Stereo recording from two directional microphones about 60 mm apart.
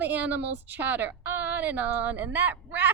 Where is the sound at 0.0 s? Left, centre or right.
Right.